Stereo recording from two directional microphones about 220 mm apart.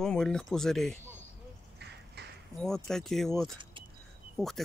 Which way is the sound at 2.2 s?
50° right (ahead or behind).